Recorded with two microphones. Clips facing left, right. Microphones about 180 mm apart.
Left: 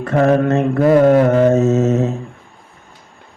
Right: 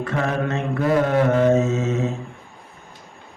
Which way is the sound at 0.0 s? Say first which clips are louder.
Left 9 dB; 45° left (ahead or behind).